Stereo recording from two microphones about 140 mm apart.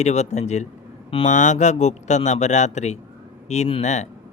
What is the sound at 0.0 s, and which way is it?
Speech, 55° left (ahead or behind).